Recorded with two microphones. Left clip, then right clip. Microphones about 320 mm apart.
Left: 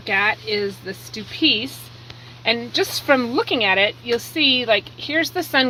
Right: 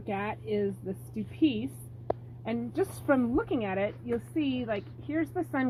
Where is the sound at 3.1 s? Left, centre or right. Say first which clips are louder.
Left 10 dB; centre.